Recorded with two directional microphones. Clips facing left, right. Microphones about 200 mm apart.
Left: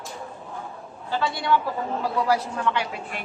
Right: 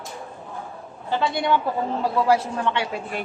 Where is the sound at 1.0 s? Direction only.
20° right (ahead or behind).